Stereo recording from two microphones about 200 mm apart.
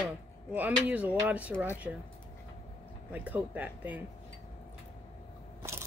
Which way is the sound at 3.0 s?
5° right (ahead or behind).